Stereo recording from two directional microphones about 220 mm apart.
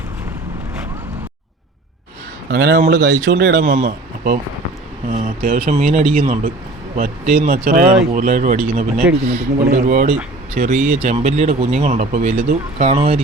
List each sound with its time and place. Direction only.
2.5 s speech: 50° right (ahead or behind); by 13.1 s 25° right (ahead or behind)